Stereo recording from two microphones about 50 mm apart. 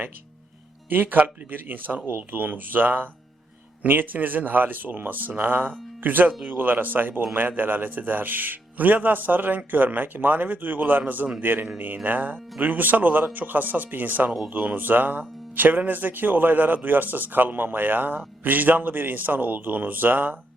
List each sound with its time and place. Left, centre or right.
0.9 s a man's voice: right